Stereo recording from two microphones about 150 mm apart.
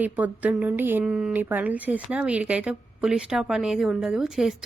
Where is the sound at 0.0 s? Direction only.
10° right (ahead or behind).